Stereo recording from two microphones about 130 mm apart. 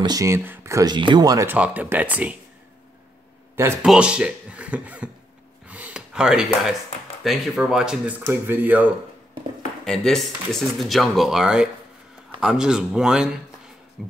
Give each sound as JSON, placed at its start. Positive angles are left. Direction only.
{"t": 0.0, "sound": "speech", "side_deg": -25}
{"t": 0.9, "sound": "speech", "side_deg": -35}
{"t": 1.5, "sound": "speech", "side_deg": -10}
{"t": 3.8, "sound": "speech", "side_deg": -5}
{"t": 5.7, "sound": "gasp", "side_deg": -10}
{"t": 7.2, "sound": "speech", "side_deg": -5}
{"t": 9.8, "sound": "speech", "side_deg": 5}
{"t": 14.0, "sound": "music", "side_deg": 0}